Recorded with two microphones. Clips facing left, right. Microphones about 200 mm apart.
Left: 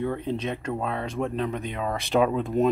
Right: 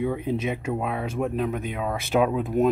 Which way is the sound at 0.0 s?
15° right (ahead or behind).